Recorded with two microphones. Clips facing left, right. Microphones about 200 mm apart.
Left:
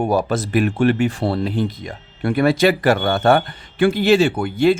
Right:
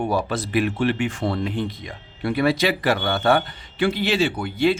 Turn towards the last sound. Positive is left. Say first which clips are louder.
# left 5 dB
turn(degrees=50)  # may be behind; listen again after turning